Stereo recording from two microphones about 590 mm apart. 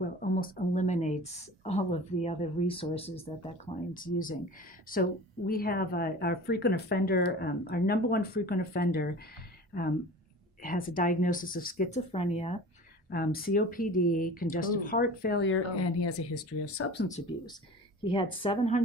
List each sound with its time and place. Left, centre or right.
0.0 s speech: centre
10.6 s speech: centre